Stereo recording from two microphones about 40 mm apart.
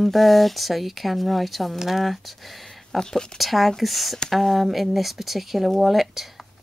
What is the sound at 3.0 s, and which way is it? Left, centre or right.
Speech, centre.